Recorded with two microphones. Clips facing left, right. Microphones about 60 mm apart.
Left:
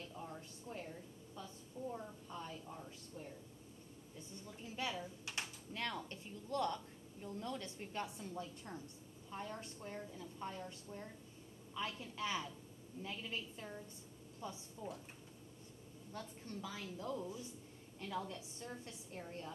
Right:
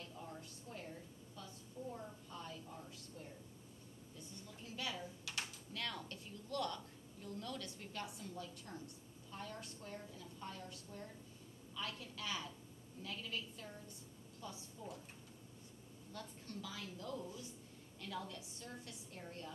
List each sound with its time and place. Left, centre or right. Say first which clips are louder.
0.4 s a sound: left 3 dB; left
4.6 s a woman's voice: left 3 dB; left
14.8 s speech: left 3 dB; centre
16.1 s a woman's voice: left 2 dB; left